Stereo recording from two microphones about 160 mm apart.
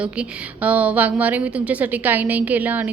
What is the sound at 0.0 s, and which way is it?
A woman's voice, 10° right (ahead or behind).